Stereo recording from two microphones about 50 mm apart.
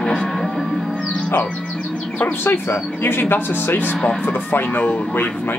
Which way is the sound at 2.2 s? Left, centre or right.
Left.